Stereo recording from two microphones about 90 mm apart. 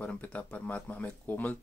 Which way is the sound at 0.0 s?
15° left (ahead or behind).